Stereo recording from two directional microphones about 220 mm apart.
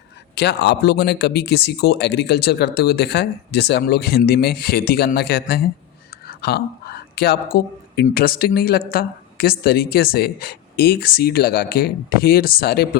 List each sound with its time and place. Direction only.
0.3 s speech: 50° left (ahead or behind)